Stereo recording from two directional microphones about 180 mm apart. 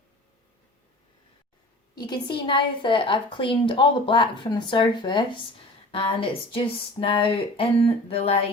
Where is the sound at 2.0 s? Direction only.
25° left (ahead or behind).